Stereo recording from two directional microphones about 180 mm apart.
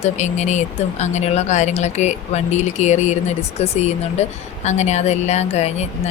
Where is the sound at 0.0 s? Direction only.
40° left (ahead or behind).